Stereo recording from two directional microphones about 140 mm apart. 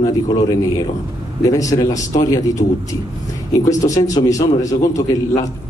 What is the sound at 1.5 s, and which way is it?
Speech, 25° left (ahead or behind).